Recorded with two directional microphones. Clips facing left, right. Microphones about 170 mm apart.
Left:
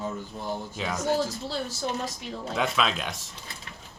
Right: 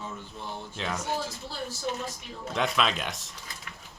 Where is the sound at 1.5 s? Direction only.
90° left.